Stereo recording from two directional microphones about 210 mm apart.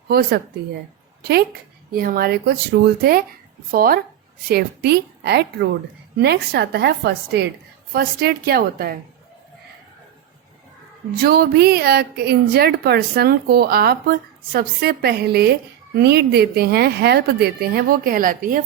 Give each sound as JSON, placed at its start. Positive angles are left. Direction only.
{"t": 0.1, "sound": "a woman's voice", "side_deg": -45}
{"t": 1.9, "sound": "a woman's voice", "side_deg": -45}
{"t": 11.2, "sound": "a woman's voice", "side_deg": -45}